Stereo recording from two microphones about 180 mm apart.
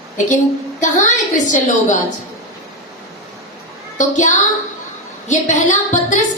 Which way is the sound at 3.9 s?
40° left (ahead or behind).